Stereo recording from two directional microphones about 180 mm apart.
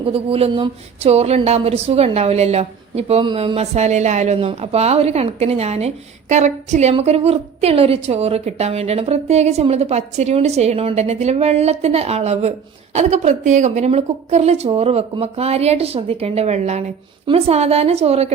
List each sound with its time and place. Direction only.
0.0 s speech: 30° right (ahead or behind)